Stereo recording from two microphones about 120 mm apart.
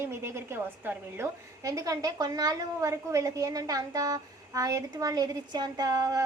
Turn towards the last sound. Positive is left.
turn(degrees=-30)  # may be behind; listen again after turning